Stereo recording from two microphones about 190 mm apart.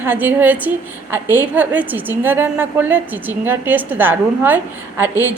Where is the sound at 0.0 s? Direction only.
10° right (ahead or behind).